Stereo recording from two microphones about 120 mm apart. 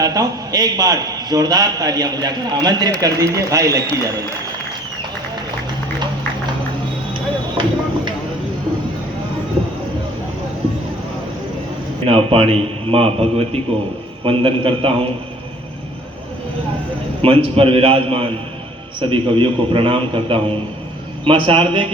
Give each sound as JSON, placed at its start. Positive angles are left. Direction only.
{"t": 0.0, "sound": "a man's voice", "side_deg": -30}
{"t": 7.5, "sound": "a sound", "side_deg": -40}
{"t": 12.0, "sound": "a man's voice", "side_deg": -50}
{"t": 17.2, "sound": "a man's voice", "side_deg": -55}